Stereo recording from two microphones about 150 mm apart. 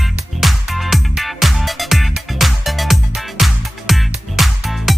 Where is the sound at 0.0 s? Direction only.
5° right (ahead or behind).